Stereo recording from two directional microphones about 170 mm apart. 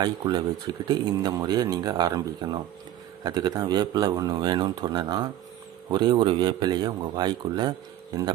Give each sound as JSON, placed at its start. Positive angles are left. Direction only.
{"t": 0.0, "sound": "speech", "side_deg": -25}